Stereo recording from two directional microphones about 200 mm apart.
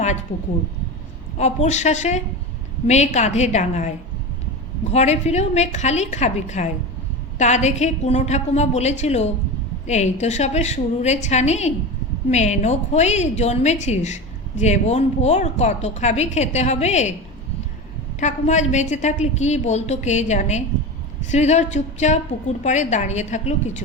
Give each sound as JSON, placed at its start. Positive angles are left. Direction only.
{"t": 1.4, "sound": "a woman's voice", "side_deg": 35}
{"t": 18.2, "sound": "a woman's voice", "side_deg": 35}